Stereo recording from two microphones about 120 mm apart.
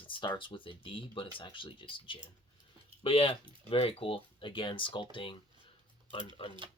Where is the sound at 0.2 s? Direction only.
40° left (ahead or behind).